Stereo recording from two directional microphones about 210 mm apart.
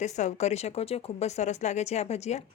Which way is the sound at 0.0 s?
35° left (ahead or behind).